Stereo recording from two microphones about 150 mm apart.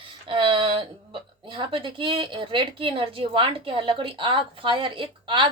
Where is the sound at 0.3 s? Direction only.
35° right (ahead or behind).